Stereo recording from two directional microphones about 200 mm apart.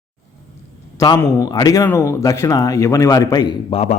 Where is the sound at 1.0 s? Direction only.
20° left (ahead or behind).